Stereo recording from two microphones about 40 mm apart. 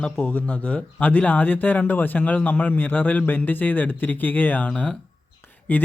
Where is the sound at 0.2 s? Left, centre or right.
Left.